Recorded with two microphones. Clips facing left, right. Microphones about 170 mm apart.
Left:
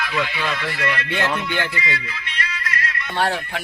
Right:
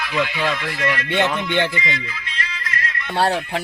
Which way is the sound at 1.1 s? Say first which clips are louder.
Right 3 dB; 25° right (ahead or behind).